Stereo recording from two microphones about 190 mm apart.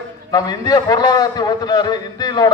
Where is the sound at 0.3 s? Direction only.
20° left (ahead or behind).